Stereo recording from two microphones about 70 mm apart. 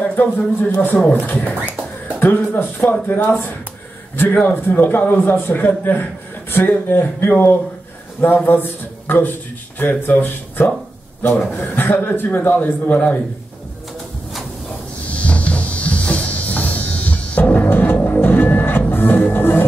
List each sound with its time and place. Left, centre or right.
0.0 s a sound: left
0.7 s a man's voice: left
15.0 s music: centre